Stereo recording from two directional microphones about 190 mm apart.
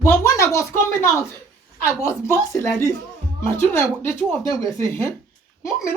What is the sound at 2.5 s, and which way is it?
Speech, 15° left (ahead or behind).